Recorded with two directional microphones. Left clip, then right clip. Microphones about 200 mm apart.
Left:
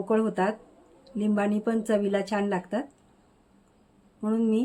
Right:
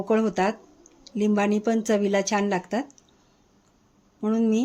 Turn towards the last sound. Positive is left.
turn(degrees=-20)  # may be behind; listen again after turning